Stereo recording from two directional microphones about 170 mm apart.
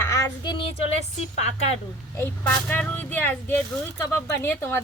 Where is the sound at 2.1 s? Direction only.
10° left (ahead or behind).